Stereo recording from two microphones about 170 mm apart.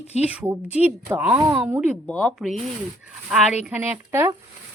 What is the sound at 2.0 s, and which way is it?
A woman's voice, 5° left (ahead or behind).